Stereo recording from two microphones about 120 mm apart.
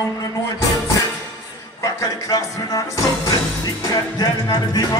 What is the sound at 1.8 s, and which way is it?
A man's voice, 25° left (ahead or behind).